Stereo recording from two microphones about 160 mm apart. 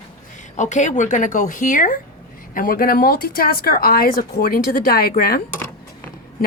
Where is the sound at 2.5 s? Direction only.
65° left (ahead or behind).